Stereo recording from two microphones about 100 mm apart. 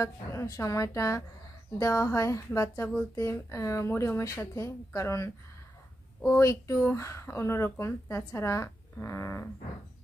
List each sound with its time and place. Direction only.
0.0 s a woman's voice: 30° left (ahead or behind)